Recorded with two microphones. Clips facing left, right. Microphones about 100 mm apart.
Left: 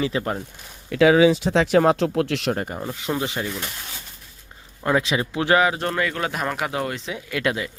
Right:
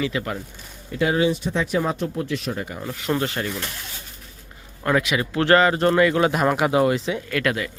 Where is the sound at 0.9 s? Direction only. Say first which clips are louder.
Left 6 dB; 90° left.